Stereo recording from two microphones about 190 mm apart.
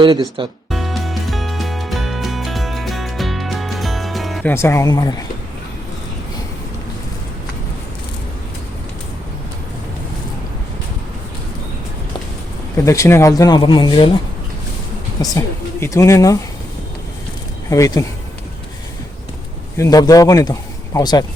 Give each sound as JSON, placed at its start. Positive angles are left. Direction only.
{"t": 0.0, "sound": "speech", "side_deg": -25}
{"t": 0.7, "sound": "music", "side_deg": 0}
{"t": 4.5, "sound": "speech", "side_deg": 15}
{"t": 12.7, "sound": "speech", "side_deg": 15}
{"t": 15.2, "sound": "speech", "side_deg": 15}
{"t": 17.7, "sound": "speech", "side_deg": 20}
{"t": 19.7, "sound": "speech", "side_deg": 15}